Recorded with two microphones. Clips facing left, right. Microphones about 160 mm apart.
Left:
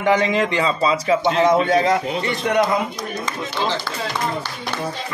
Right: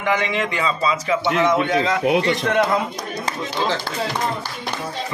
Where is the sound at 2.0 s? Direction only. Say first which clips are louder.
Right 6 dB; 90° right.